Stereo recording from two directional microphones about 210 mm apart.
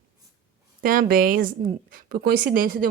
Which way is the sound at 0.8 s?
45° right (ahead or behind).